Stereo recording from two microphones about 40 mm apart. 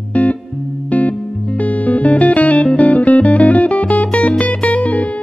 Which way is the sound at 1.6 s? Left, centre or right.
Left.